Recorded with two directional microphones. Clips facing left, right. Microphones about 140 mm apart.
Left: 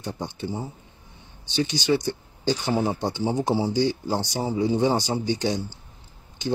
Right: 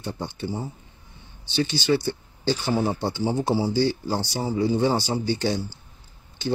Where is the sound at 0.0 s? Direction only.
15° left (ahead or behind).